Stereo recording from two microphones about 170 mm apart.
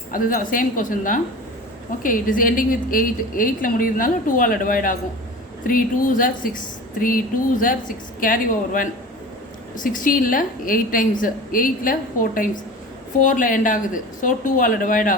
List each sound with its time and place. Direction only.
0.1 s a woman's voice: 55° left (ahead or behind)